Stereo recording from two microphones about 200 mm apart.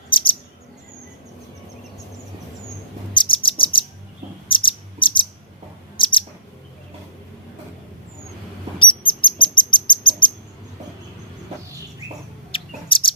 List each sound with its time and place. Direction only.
0.1 s chirp: 25° left (ahead or behind)
3.2 s bird: 25° left (ahead or behind)
4.4 s cricket: 25° left (ahead or behind)
6.0 s bird: 25° left (ahead or behind)
8.8 s bird: 25° left (ahead or behind)
12.5 s bird: 25° left (ahead or behind)